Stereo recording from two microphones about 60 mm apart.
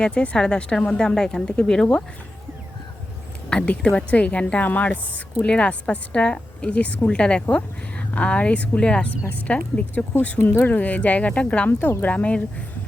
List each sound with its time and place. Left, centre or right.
0.0 s speech: centre
3.5 s a woman's voice: centre